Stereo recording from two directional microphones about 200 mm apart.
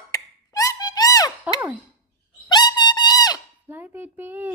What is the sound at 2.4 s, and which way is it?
Music, 20° left (ahead or behind).